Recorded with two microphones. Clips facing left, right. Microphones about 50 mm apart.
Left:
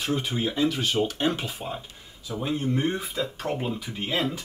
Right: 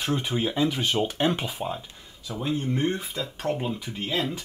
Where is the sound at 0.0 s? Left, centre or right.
Right.